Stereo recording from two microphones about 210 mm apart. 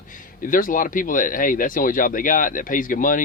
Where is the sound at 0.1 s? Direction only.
40° left (ahead or behind).